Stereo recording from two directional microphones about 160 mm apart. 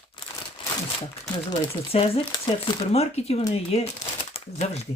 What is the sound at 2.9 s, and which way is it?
Speech, 40° left (ahead or behind).